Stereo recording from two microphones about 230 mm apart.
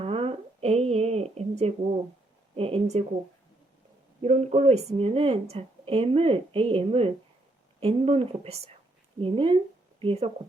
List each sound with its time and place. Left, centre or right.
0.0 s a sound: right
2.6 s a woman's voice: right
4.2 s a woman's voice: right